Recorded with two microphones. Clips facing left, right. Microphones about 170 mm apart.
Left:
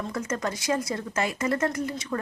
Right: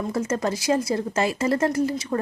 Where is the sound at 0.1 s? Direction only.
25° right (ahead or behind).